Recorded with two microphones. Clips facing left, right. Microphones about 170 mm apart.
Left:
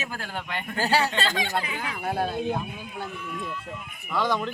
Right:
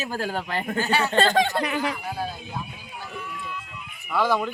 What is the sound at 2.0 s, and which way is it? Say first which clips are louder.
Speech: left 5 dB; 55° left (ahead or behind).